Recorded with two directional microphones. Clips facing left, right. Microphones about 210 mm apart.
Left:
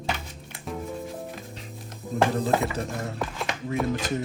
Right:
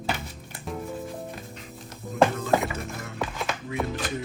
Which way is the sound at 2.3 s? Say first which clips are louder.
Left 1 dB; 35° left (ahead or behind).